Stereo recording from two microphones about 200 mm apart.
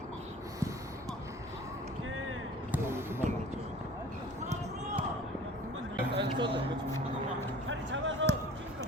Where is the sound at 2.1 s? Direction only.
90° right.